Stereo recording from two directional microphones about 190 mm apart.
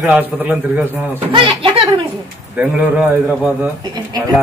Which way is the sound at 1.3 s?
25° right (ahead or behind).